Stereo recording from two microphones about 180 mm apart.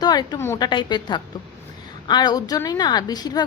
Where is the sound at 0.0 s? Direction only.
25° left (ahead or behind).